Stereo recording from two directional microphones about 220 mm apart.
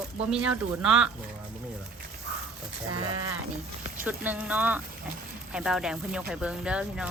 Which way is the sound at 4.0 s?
10° right (ahead or behind).